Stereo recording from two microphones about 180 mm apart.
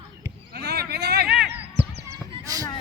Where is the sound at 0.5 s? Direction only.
60° right (ahead or behind).